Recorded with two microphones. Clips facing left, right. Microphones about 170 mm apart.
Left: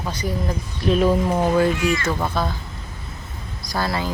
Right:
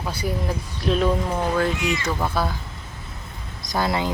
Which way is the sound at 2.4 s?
10° right (ahead or behind).